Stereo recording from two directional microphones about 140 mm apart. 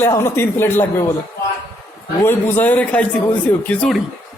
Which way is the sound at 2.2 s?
15° left (ahead or behind).